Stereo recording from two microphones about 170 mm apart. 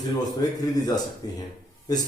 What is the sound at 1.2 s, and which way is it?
Speech, 25° left (ahead or behind).